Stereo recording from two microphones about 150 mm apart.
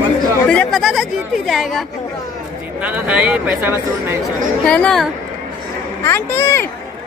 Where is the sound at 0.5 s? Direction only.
5° left (ahead or behind); by 4.2 s 15° right (ahead or behind).